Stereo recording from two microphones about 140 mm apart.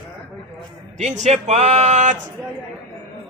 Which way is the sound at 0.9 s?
55° right (ahead or behind).